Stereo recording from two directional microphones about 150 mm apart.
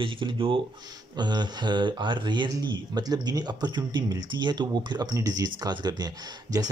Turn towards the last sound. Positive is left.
turn(degrees=-25)  # may be behind; listen again after turning